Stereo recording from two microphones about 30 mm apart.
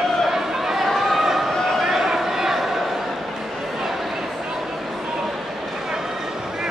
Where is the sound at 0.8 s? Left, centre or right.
Centre.